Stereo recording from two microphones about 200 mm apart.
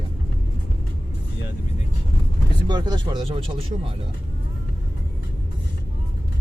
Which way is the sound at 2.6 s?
20° right (ahead or behind).